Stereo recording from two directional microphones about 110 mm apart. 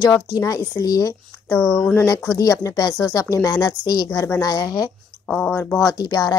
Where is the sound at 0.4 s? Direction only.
30° left (ahead or behind).